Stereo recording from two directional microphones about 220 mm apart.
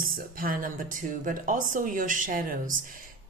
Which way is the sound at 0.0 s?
40° right (ahead or behind).